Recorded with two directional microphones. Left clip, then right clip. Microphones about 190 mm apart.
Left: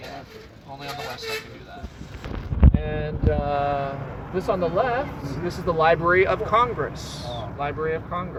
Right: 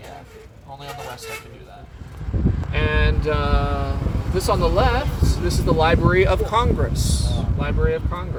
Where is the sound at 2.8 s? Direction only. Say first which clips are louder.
Right 5 dB; 75° right (ahead or behind).